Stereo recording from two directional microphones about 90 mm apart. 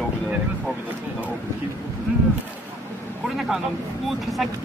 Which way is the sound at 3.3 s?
5° right (ahead or behind).